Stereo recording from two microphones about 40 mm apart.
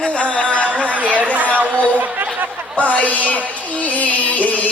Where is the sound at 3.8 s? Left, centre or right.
Left.